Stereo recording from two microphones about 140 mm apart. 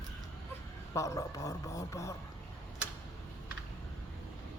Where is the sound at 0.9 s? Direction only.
20° left (ahead or behind).